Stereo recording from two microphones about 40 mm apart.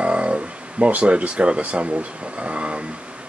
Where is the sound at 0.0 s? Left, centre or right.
Right.